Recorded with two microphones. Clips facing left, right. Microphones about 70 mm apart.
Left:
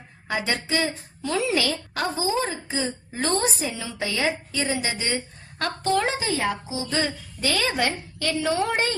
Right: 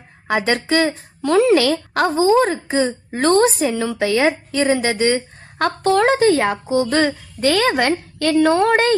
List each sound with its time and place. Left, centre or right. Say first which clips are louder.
0.3 s a woman's voice: right 8 dB; right